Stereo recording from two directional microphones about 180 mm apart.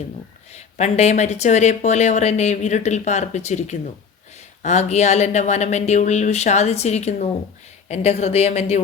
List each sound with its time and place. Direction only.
0.5 s speech: 40° left (ahead or behind)